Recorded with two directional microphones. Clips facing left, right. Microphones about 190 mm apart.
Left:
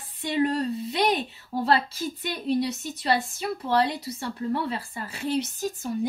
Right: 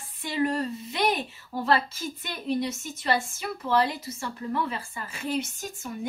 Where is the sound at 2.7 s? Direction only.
35° left (ahead or behind).